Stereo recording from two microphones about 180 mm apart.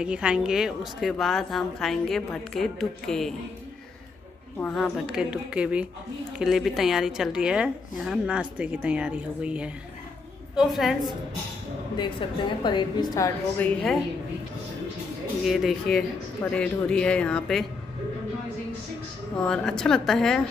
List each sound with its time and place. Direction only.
0.0 s a woman's voice: 5° right (ahead or behind)
4.6 s a woman's voice: 5° left (ahead or behind)
12.0 s a woman's voice: 25° left (ahead or behind)
13.6 s a woman's voice: centre (ahead or behind)
15.4 s a woman's voice: centre (ahead or behind)
19.4 s a woman's voice: 5° left (ahead or behind)